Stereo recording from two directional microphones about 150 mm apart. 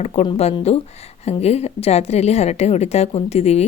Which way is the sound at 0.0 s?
40° left (ahead or behind).